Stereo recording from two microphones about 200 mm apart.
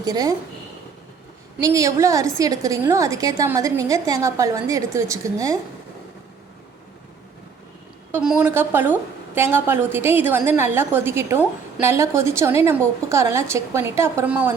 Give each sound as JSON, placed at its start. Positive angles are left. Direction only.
{"t": 0.0, "sound": "a woman's voice", "side_deg": -20}
{"t": 1.6, "sound": "a woman's voice", "side_deg": -15}
{"t": 8.1, "sound": "a woman's voice", "side_deg": -5}